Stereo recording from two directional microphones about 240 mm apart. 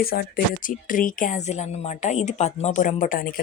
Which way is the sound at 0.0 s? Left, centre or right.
Left.